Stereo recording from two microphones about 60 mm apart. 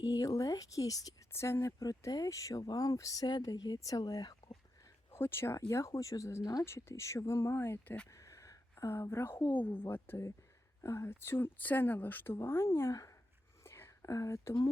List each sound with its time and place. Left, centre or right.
0.0 s speech: left
1.3 s speech: left
2.0 s speech: left
5.1 s speech: left
5.5 s speech: left
6.4 s speech: left
6.7 s speech: left
8.1 s a sound: left
8.9 s speech: left
9.6 s speech: left
12.9 s speech: left
13.7 s whispering: left